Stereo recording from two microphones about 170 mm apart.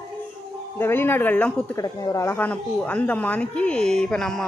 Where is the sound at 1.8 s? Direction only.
20° left (ahead or behind).